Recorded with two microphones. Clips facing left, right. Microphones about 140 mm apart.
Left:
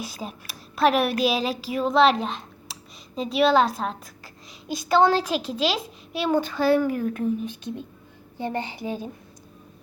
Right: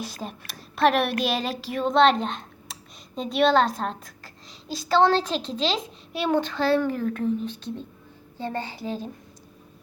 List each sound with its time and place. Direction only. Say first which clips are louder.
0.2 s a woman's voice: even; 5° left (ahead or behind)